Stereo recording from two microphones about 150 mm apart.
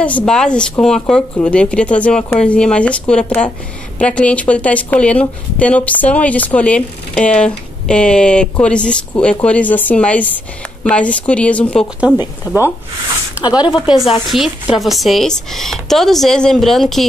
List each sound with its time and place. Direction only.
0.0 s a woman's voice: 5° left (ahead or behind)
12.5 s speech: 20° left (ahead or behind)
13.6 s speech: 5° right (ahead or behind)